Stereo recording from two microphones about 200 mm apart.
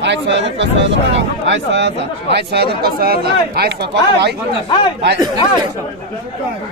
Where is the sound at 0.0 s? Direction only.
60° right (ahead or behind).